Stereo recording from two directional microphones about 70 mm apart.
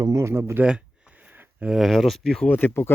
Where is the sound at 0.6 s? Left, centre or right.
Right.